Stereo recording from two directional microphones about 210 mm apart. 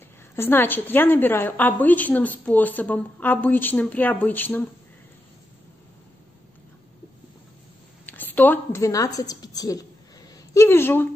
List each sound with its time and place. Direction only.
0.4 s speech: 10° left (ahead or behind)
8.0 s a woman's voice: 10° left (ahead or behind)